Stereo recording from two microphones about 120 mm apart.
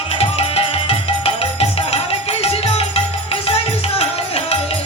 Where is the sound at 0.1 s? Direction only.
55° left (ahead or behind).